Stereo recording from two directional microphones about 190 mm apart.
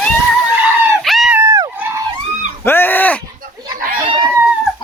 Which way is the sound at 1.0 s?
Centre (ahead or behind).